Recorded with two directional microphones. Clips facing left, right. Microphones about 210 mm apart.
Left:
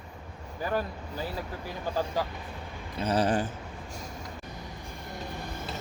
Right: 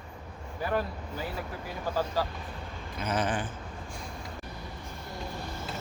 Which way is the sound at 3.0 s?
35° left (ahead or behind).